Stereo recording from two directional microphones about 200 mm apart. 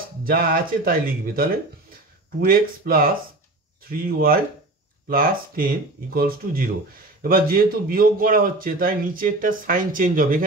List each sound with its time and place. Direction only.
0.2 s a man's voice: 45° right (ahead or behind)